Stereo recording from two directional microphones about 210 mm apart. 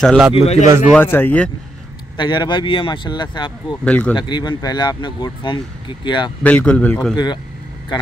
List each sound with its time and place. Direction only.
0.0 s speech: centre (ahead or behind)
0.3 s speech: 30° left (ahead or behind)
0.7 s speech: 10° right (ahead or behind)
0.9 s speech: 10° left (ahead or behind)
2.1 s speech: 20° left (ahead or behind)
3.8 s speech: 5° left (ahead or behind)
4.1 s speech: 20° left (ahead or behind)
6.4 s speech: 5° left (ahead or behind)